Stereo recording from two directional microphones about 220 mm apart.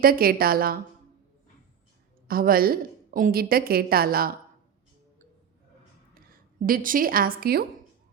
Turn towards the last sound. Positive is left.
turn(degrees=-45)  # may be behind; listen again after turning